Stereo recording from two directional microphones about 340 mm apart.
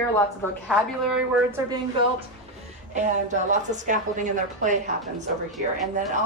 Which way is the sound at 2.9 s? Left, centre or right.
Right.